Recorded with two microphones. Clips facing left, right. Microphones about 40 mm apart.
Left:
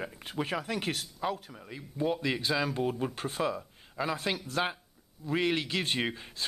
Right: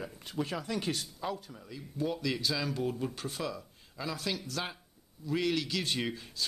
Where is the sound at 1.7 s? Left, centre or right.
Left.